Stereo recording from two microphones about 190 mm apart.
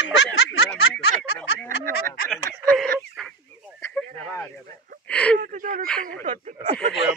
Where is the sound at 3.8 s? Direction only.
10° left (ahead or behind).